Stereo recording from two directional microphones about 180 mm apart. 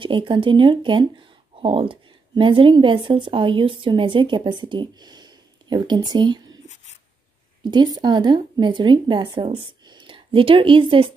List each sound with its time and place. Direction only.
0.0 s a woman's voice: 30° right (ahead or behind)
7.7 s speech: 25° right (ahead or behind)